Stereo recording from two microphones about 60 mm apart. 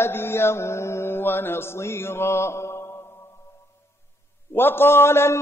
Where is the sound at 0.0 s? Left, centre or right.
Left.